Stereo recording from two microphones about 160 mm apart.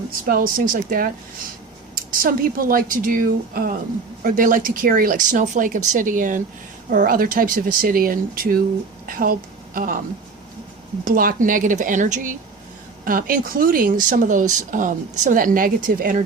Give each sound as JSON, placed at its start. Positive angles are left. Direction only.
{"t": 0.3, "sound": "speech", "side_deg": -65}
{"t": 11.0, "sound": "speech", "side_deg": -60}
{"t": 13.1, "sound": "speech", "side_deg": -60}